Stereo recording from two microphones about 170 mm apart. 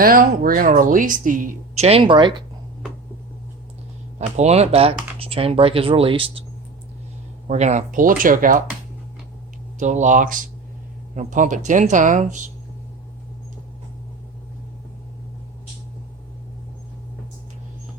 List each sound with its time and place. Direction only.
0.0 s speech: 55° right (ahead or behind); by 2.4 s 30° right (ahead or behind)
4.4 s speech: 40° right (ahead or behind)
7.4 s speech: 45° right (ahead or behind)
9.7 s speech: 45° right (ahead or behind)